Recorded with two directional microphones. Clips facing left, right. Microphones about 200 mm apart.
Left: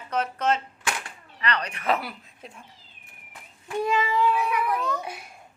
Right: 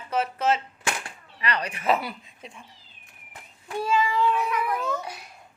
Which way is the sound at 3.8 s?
20° left (ahead or behind).